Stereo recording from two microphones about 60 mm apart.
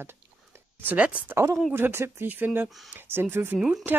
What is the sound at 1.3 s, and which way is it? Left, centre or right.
Speech, right.